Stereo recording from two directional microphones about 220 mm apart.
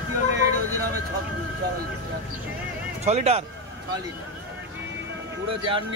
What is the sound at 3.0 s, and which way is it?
Speech, 30° right (ahead or behind).